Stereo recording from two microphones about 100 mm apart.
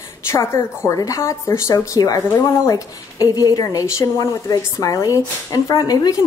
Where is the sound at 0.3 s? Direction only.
30° left (ahead or behind).